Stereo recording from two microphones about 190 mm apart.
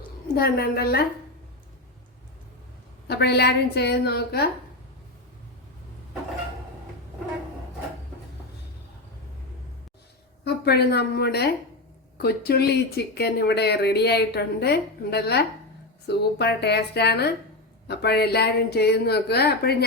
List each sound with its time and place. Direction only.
0.3 s speech: 55° left (ahead or behind)
3.1 s speech: 60° left (ahead or behind)
10.4 s a woman's voice: 55° left (ahead or behind)